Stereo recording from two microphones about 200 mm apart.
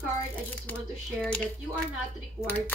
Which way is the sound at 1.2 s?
5° left (ahead or behind).